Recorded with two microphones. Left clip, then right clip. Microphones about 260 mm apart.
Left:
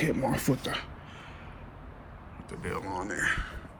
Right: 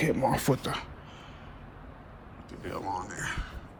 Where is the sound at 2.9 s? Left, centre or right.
Right.